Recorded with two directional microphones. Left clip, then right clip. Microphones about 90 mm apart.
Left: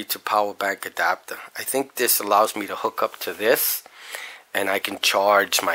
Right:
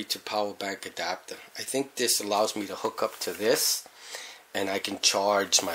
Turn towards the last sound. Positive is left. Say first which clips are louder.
# left 6 dB
turn(degrees=30)  # may be behind; listen again after turning